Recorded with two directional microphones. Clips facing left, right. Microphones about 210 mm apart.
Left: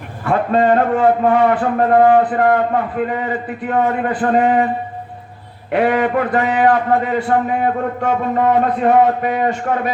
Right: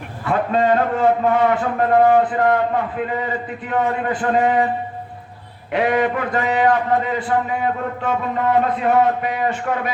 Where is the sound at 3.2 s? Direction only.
50° left (ahead or behind).